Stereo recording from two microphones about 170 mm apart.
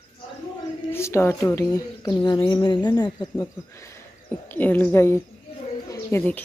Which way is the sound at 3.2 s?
15° left (ahead or behind).